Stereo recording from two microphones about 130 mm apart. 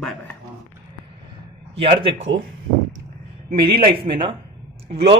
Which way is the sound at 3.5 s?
45° right (ahead or behind).